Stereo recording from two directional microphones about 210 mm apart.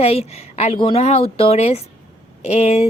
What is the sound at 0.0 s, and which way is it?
A woman's voice, 30° left (ahead or behind).